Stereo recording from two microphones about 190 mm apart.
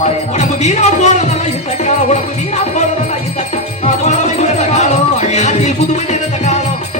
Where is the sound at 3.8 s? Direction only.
40° left (ahead or behind).